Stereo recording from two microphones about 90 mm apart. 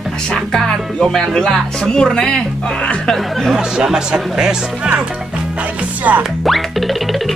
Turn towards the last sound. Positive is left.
turn(degrees=0)  # may be behind; listen again after turning